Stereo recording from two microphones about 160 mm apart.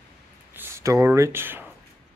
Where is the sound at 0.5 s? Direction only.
15° right (ahead or behind).